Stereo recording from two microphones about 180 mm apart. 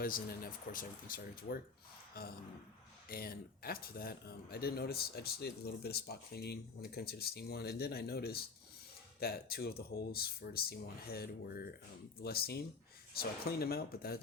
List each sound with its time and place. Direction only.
0.0 s a man's voice: 50° left (ahead or behind)